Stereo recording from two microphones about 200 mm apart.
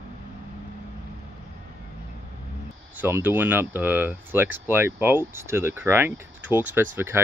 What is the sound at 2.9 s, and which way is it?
Speech, 10° right (ahead or behind).